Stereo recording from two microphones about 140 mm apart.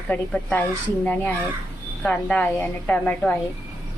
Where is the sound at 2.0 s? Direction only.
10° left (ahead or behind).